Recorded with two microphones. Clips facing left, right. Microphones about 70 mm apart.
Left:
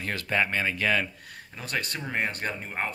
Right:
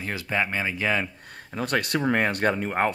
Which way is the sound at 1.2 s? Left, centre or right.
Right.